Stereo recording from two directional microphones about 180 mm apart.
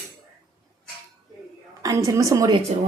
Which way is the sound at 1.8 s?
20° right (ahead or behind).